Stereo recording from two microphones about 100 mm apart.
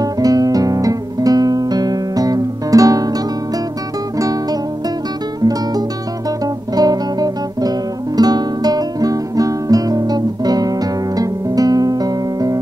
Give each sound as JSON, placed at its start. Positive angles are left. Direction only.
{"t": 0.0, "sound": "guitar", "side_deg": -40}
{"t": 4.2, "sound": "music", "side_deg": -40}
{"t": 8.2, "sound": "guitar", "side_deg": -40}